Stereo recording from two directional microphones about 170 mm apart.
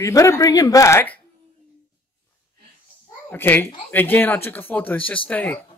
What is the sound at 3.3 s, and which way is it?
Speech, 10° left (ahead or behind).